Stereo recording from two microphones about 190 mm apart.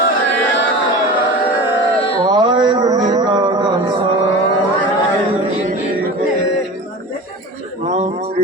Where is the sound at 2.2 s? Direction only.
25° right (ahead or behind).